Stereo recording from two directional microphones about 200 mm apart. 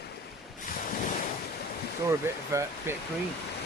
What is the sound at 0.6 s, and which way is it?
Ocean, 40° left (ahead or behind).